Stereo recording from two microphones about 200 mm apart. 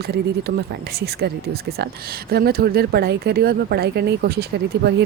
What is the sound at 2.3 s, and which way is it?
Speech, 50° right (ahead or behind).